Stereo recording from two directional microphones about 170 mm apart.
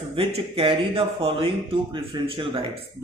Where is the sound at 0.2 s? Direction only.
30° right (ahead or behind).